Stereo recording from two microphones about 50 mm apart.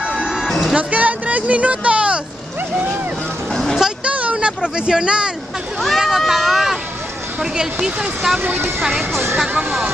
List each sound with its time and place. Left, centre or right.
0.0 s music: centre
0.7 s speech: right
4.0 s speech: right
5.8 s speech: centre
8.4 s speech: right
9.5 s speech: right